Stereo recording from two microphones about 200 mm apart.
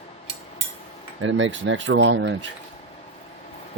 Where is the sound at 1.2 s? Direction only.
70° right (ahead or behind).